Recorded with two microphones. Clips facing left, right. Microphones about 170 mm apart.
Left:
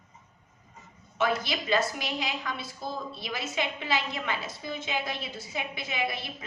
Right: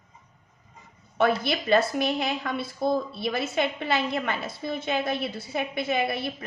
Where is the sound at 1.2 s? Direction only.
55° right (ahead or behind).